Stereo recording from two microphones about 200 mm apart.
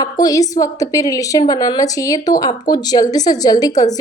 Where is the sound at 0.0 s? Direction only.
20° left (ahead or behind).